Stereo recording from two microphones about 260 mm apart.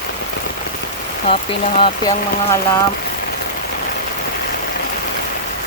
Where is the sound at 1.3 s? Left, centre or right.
Left.